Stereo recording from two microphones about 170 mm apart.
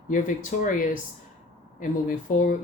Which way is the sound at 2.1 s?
50° left (ahead or behind).